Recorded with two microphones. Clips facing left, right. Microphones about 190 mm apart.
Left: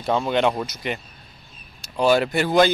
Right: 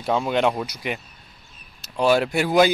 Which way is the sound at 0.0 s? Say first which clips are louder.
Even; centre (ahead or behind).